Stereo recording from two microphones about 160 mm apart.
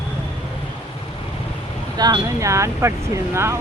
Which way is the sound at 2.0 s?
25° right (ahead or behind).